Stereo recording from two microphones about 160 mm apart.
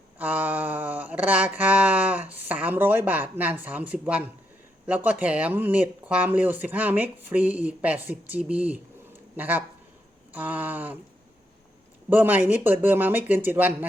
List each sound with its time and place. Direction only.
0.2 s a sound: 10° right (ahead or behind)
4.9 s speech: 10° right (ahead or behind)
12.1 s speech: 10° right (ahead or behind)